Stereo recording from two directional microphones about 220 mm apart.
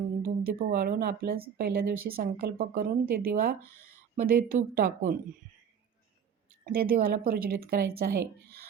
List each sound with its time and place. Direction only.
0.2 s a woman's voice: 40° right (ahead or behind)
6.7 s speech: 40° right (ahead or behind)